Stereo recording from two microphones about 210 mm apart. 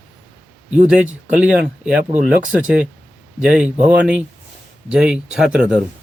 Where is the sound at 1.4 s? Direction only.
5° right (ahead or behind).